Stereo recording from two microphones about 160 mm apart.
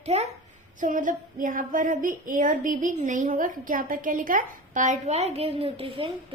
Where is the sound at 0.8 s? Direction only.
55° right (ahead or behind).